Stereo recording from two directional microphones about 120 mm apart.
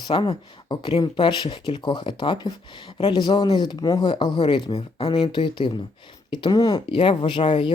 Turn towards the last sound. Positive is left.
turn(degrees=45)  # may be behind; listen again after turning